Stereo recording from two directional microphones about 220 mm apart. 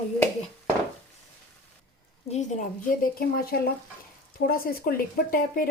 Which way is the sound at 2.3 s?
35° left (ahead or behind).